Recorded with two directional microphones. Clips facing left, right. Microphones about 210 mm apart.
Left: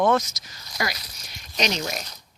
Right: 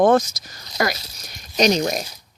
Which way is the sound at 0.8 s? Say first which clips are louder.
Right 7 dB; 50° right (ahead or behind).